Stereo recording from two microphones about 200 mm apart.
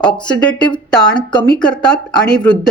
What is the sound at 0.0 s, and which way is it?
Speech, 20° left (ahead or behind).